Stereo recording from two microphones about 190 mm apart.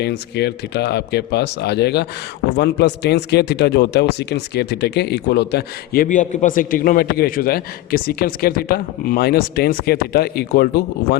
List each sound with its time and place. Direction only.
0.0 s speech: 60° left (ahead or behind)